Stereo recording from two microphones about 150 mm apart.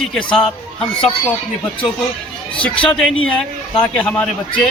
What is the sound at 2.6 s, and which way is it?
A man's voice, 10° left (ahead or behind).